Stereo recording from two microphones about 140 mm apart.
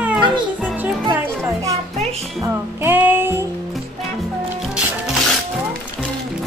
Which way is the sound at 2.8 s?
15° right (ahead or behind).